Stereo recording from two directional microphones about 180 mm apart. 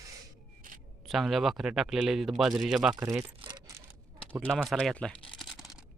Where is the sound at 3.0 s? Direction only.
15° right (ahead or behind).